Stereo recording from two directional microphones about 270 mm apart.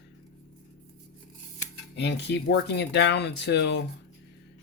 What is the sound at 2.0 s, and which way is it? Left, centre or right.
Speech, left.